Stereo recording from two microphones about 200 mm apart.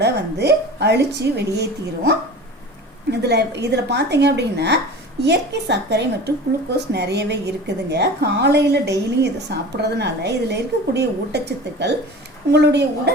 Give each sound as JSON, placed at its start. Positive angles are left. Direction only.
{"t": 0.0, "sound": "a woman's voice", "side_deg": -55}
{"t": 3.1, "sound": "a woman's voice", "side_deg": -55}